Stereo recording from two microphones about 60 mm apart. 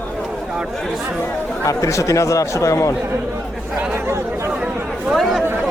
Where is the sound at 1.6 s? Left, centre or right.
Left.